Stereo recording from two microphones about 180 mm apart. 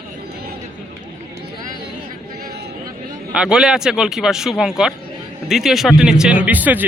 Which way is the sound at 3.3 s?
5° right (ahead or behind).